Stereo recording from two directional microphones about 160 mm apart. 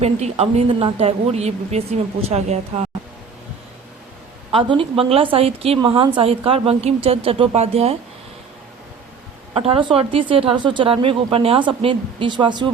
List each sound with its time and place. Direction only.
0.0 s a woman's voice: 40° right (ahead or behind)
4.5 s a woman's voice: 35° right (ahead or behind)
9.6 s a woman's voice: 35° right (ahead or behind)